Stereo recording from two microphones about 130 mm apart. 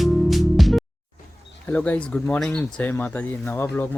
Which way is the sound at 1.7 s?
15° left (ahead or behind).